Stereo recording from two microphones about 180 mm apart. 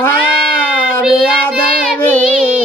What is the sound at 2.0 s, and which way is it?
Child singing, 10° left (ahead or behind).